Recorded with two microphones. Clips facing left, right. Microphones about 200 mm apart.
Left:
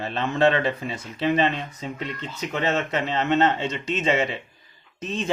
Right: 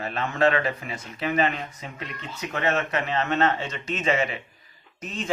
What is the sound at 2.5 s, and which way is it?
Speech, 25° left (ahead or behind).